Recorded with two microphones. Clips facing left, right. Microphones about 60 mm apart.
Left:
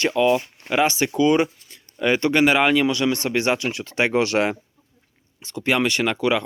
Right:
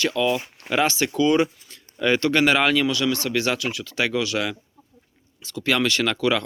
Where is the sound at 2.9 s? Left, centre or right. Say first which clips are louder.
Left 2 dB; left.